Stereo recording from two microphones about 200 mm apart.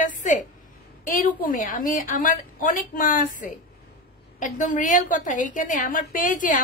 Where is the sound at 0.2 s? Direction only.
40° left (ahead or behind).